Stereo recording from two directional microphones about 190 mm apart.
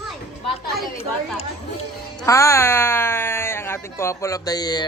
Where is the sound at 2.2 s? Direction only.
15° left (ahead or behind).